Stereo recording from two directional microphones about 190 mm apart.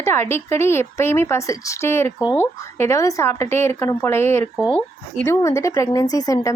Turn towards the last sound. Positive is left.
turn(degrees=15)  # may be behind; listen again after turning